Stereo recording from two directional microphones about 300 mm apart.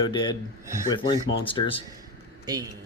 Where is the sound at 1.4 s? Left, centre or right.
Centre.